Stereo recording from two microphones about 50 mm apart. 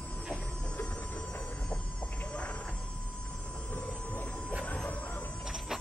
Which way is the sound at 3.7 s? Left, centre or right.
Left.